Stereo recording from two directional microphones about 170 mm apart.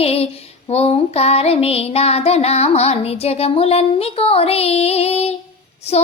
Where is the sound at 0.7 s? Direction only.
35° left (ahead or behind).